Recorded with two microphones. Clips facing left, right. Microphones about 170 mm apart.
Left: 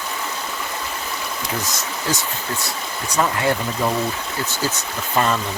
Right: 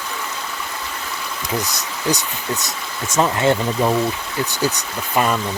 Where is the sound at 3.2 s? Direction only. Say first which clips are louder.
Right 3 dB; 25° right (ahead or behind).